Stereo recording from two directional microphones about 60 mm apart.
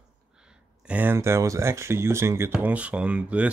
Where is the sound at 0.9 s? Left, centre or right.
Right.